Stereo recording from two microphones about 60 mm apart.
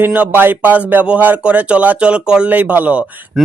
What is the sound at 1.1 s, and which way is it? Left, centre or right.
Speech, right.